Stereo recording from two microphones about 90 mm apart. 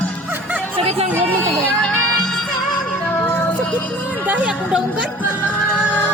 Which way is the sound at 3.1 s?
20° left (ahead or behind).